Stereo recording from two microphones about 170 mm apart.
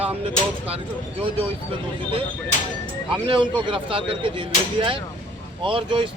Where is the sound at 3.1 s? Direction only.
30° right (ahead or behind).